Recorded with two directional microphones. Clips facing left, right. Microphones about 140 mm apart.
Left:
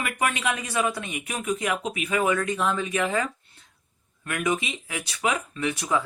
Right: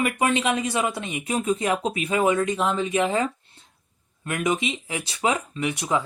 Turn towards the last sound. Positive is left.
turn(degrees=-20)  # may be behind; listen again after turning